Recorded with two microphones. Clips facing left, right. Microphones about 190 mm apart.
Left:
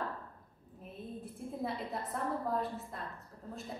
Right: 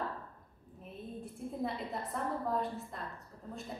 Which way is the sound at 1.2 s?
Centre (ahead or behind).